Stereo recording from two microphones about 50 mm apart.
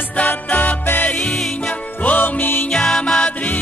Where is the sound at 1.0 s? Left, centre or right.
Left.